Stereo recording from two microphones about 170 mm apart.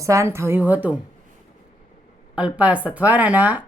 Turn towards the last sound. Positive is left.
turn(degrees=-10)  # may be behind; listen again after turning